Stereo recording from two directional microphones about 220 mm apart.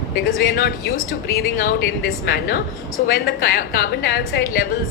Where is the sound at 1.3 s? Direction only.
40° left (ahead or behind).